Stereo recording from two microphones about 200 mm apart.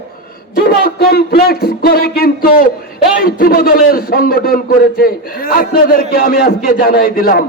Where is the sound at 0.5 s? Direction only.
50° left (ahead or behind).